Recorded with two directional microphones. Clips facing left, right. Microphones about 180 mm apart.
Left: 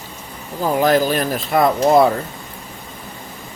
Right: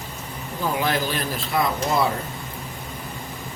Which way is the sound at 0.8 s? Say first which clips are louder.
Left 12 dB; 45° left (ahead or behind).